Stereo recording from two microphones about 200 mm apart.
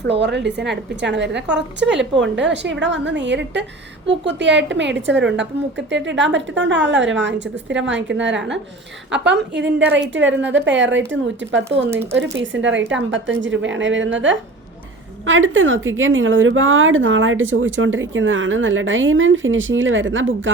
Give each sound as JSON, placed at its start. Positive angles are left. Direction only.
{"t": 0.0, "sound": "a woman's voice", "side_deg": -60}